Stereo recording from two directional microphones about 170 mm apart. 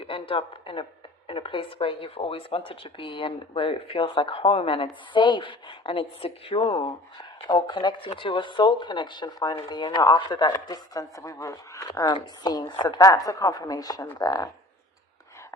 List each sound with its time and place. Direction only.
0.0 s speech: 30° left (ahead or behind)